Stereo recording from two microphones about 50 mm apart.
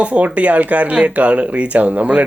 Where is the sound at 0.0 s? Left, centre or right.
Right.